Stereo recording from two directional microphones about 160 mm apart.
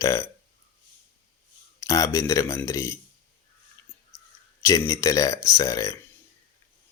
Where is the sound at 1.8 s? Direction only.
20° left (ahead or behind).